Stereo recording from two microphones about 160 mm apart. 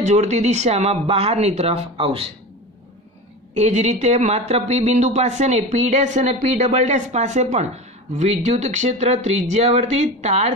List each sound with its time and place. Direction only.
0.0 s speech: 45° right (ahead or behind)
3.5 s speech: 45° right (ahead or behind)